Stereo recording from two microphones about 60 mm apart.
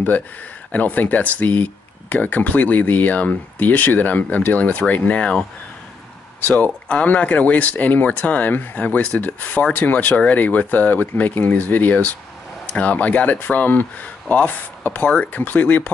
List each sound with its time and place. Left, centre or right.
0.7 s speech: left
6.4 s speech: left